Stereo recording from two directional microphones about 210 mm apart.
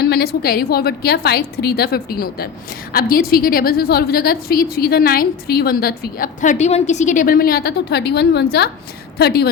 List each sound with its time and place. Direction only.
0.0 s a woman's voice: 50° left (ahead or behind)